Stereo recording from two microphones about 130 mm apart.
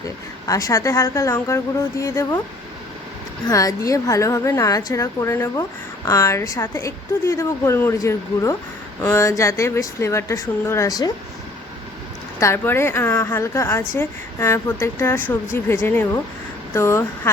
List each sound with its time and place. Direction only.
0.4 s a woman's voice: 25° left (ahead or behind)
3.4 s a woman's voice: 25° left (ahead or behind)
12.4 s a woman's voice: 20° left (ahead or behind)